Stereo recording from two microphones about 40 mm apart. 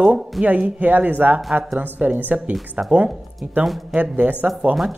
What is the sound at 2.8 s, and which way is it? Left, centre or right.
Speech, right.